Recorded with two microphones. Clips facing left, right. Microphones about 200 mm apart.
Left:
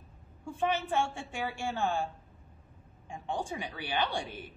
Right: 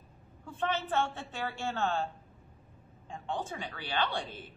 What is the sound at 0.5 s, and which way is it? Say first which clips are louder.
A woman's voice: left 2 dB; 15° left (ahead or behind).